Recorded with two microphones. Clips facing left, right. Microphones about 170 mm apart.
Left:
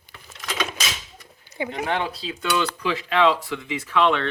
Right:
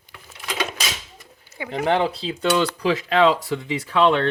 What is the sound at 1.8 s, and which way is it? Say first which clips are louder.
Speech: right 8 dB; 30° right (ahead or behind).